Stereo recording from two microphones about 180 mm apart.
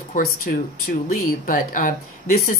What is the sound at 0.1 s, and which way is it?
Speech, 55° left (ahead or behind).